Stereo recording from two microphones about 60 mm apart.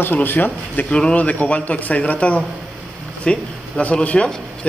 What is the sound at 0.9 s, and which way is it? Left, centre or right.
A man's voice, centre.